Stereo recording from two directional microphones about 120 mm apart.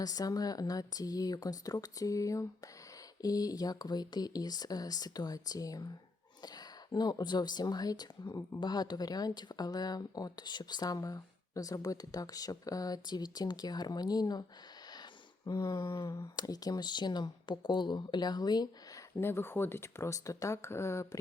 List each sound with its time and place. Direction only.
0.0 s speech: 30° left (ahead or behind)
6.9 s speech: 35° left (ahead or behind)
8.2 s speech: 20° left (ahead or behind)
8.6 s speech: 35° left (ahead or behind)
15.4 s speech: 25° left (ahead or behind)
19.1 s speech: 20° left (ahead or behind)